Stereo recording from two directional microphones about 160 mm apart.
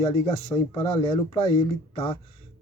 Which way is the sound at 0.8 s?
35° left (ahead or behind).